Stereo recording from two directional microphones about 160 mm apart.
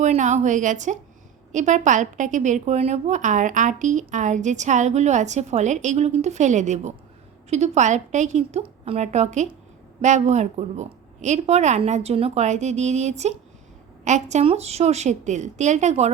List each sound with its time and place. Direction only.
0.0 s a woman's voice: 50° right (ahead or behind)